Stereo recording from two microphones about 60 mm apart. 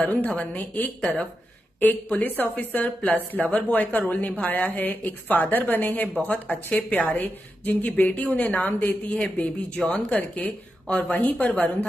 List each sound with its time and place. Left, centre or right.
0.0 s speech: left